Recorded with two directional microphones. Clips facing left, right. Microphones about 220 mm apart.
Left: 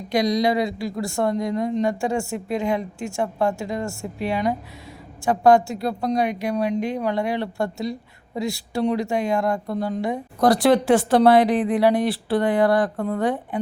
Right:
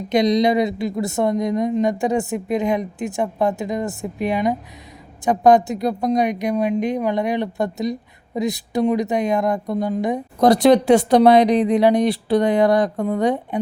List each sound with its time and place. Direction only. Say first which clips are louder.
0.1 s a woman's voice: right 4 dB; 20° right (ahead or behind)